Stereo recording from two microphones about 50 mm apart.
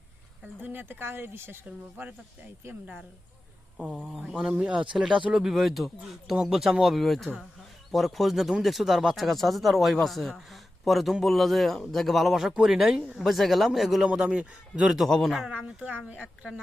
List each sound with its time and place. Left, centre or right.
0.6 s speech: right
3.9 s speech: centre
4.5 s speech: right
13.1 s speech: centre
14.2 s speech: centre
15.1 s speech: centre
15.5 s speech: right